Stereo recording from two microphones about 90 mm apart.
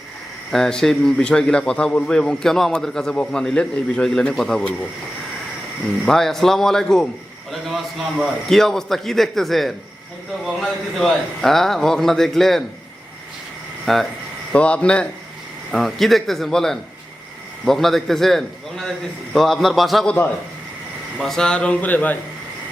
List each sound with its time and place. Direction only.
0.5 s a man's voice: 5° left (ahead or behind)
6.1 s a man's voice: 5° left (ahead or behind)
13.8 s a man's voice: centre (ahead or behind)
14.5 s a man's voice: 15° left (ahead or behind)
20.1 s a man's voice: 20° left (ahead or behind)
21.2 s a man's voice: 5° left (ahead or behind)